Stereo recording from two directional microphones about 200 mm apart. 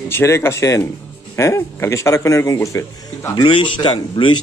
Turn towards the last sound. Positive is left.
turn(degrees=25)  # may be behind; listen again after turning